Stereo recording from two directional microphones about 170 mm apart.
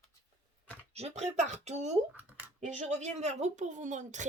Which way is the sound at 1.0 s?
40° right (ahead or behind).